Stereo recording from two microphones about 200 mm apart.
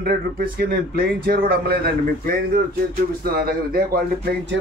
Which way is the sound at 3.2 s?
45° right (ahead or behind).